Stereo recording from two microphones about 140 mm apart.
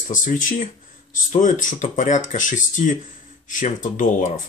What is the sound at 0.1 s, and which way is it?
Speech, 70° left (ahead or behind).